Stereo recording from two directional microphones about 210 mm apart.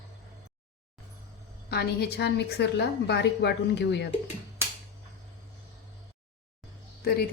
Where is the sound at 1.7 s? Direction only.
50° left (ahead or behind).